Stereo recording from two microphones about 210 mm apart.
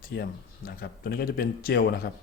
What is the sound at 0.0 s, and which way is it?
Speech, 45° left (ahead or behind).